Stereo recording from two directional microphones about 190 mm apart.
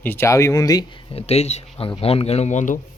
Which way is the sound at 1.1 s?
35° left (ahead or behind).